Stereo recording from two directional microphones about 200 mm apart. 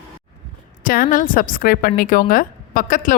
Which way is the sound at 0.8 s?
45° left (ahead or behind).